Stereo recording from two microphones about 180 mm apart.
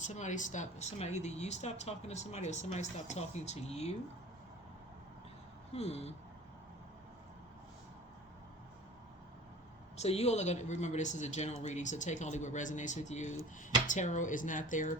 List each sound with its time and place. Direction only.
0.0 s speech: 40° left (ahead or behind)
5.7 s speech: 35° left (ahead or behind)
10.0 s speech: 35° left (ahead or behind)